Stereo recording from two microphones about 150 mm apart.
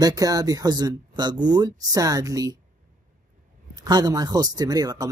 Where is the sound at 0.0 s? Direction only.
25° right (ahead or behind).